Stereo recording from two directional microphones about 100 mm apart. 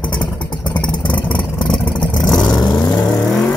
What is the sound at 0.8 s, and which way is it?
Vehicle, 55° left (ahead or behind).